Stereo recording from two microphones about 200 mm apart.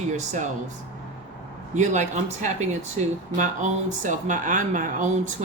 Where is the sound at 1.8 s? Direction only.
35° right (ahead or behind).